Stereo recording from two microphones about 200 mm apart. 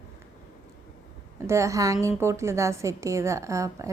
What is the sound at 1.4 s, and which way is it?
A woman's voice, 15° right (ahead or behind).